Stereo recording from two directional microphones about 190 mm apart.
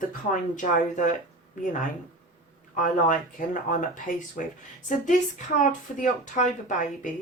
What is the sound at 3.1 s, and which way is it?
Speech, 45° left (ahead or behind).